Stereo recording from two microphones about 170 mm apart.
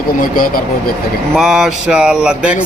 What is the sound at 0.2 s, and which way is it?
Speech, 55° left (ahead or behind).